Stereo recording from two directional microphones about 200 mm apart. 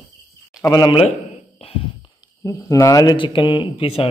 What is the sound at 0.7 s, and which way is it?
A man's voice, 25° left (ahead or behind).